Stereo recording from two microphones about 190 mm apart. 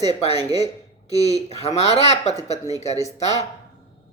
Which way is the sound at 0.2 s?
35° left (ahead or behind).